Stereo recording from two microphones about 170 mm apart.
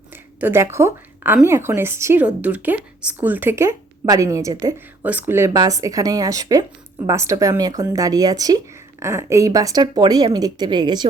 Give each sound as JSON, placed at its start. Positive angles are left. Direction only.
{"t": 0.3, "sound": "a woman's voice", "side_deg": -15}